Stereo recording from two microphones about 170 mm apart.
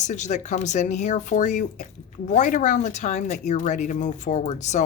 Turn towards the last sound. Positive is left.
turn(degrees=45)  # may be behind; listen again after turning